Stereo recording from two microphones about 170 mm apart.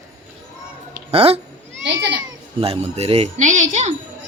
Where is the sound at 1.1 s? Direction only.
35° right (ahead or behind).